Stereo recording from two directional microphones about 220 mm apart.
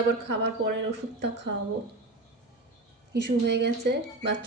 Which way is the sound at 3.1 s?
50° right (ahead or behind).